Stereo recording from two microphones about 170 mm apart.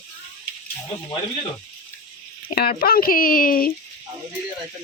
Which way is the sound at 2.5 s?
60° left (ahead or behind).